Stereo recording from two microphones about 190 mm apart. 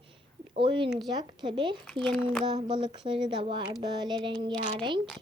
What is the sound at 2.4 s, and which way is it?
Speech, 25° right (ahead or behind).